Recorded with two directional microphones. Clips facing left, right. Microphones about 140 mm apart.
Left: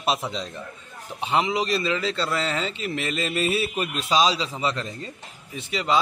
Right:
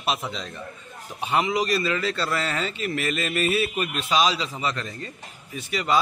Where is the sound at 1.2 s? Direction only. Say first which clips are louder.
Even; 25° left (ahead or behind).